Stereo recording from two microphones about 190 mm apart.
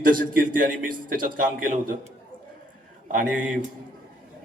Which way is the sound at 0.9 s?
45° right (ahead or behind).